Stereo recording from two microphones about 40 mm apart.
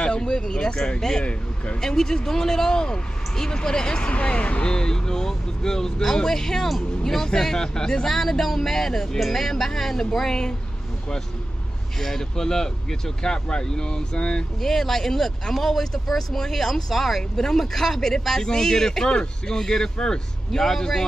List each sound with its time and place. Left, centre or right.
0.0 s speech: left
4.0 s speech: left
4.6 s speech: centre
12.0 s speech: centre
14.6 s speech: centre